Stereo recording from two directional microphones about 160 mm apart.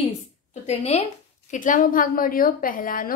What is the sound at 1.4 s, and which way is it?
A woman's voice, 55° left (ahead or behind).